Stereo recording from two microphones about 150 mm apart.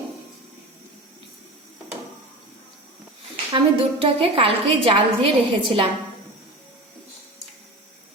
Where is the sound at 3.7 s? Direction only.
40° right (ahead or behind).